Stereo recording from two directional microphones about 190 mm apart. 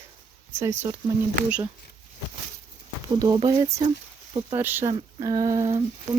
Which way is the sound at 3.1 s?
20° right (ahead or behind).